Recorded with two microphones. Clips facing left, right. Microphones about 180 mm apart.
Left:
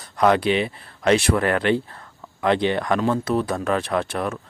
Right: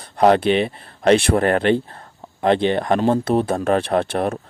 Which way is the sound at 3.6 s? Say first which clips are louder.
Right 4 dB; 55° right (ahead or behind).